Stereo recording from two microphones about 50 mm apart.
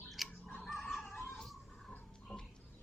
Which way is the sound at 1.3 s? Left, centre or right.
Centre.